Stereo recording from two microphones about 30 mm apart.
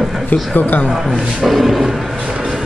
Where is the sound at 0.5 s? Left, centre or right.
Left.